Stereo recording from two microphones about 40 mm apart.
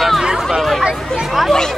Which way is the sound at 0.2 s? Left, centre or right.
Centre.